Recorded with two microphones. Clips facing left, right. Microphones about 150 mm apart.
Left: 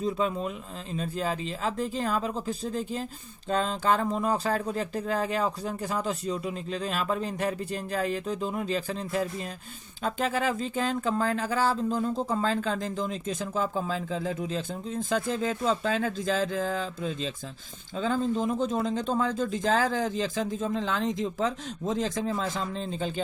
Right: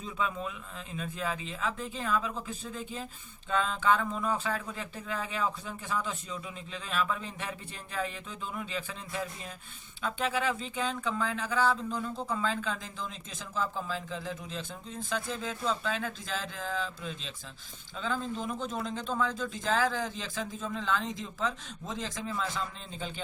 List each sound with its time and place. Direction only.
0.0 s speech: 35° left (ahead or behind)